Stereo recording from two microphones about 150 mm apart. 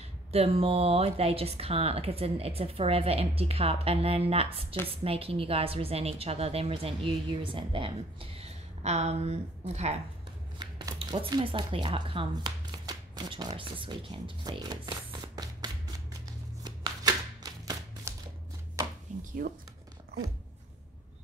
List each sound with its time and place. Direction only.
0.3 s a woman's voice: 40° right (ahead or behind)
10.6 s speech: 30° right (ahead or behind)
16.6 s shuffling cards: 30° right (ahead or behind)
19.1 s chopping: 55° right (ahead or behind)